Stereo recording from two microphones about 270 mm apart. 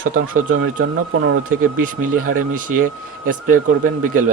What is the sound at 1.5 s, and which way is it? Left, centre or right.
Speech, right.